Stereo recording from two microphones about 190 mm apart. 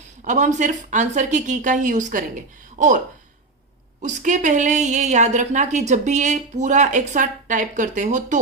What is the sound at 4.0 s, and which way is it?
A woman's voice, 40° right (ahead or behind).